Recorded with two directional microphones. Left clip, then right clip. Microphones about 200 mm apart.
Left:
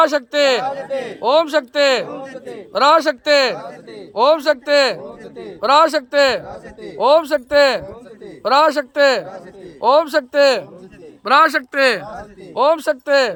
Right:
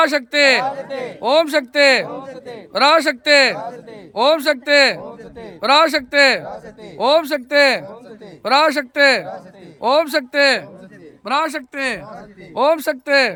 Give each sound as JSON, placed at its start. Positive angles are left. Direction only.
{"t": 0.0, "sound": "speech", "side_deg": -15}
{"t": 0.6, "sound": "speech", "side_deg": -35}
{"t": 1.2, "sound": "speech", "side_deg": -15}
{"t": 11.3, "sound": "speech", "side_deg": 5}
{"t": 12.5, "sound": "speech", "side_deg": -20}